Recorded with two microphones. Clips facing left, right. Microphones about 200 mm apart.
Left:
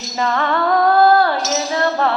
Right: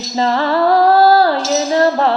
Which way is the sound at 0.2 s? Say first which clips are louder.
Right 4 dB; 30° right (ahead or behind).